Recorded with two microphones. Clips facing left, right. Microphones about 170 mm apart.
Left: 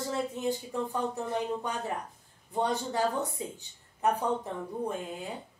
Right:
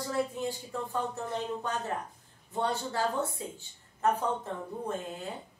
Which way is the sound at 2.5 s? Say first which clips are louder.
Left 2 dB; 15° left (ahead or behind).